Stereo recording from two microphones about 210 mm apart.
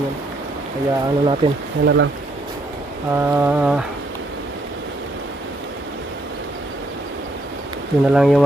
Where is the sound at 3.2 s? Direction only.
10° right (ahead or behind).